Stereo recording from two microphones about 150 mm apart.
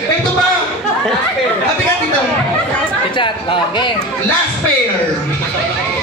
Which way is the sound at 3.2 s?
30° left (ahead or behind).